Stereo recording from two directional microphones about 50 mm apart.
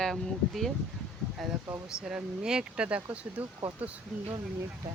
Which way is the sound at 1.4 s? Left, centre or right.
Centre.